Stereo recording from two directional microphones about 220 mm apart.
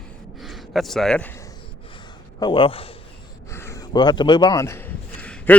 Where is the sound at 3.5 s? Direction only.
10° left (ahead or behind).